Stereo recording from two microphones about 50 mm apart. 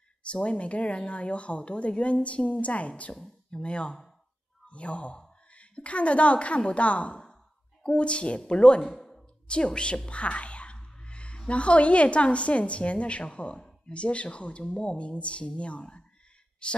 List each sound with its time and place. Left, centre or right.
0.2 s a woman's voice: left
8.9 s a sound: centre
9.5 s speech: centre